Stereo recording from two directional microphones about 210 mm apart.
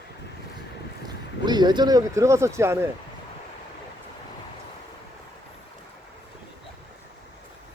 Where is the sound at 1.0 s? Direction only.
20° right (ahead or behind).